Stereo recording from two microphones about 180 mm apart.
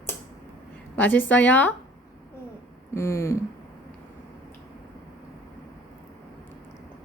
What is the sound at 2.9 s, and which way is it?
Speech, 15° left (ahead or behind).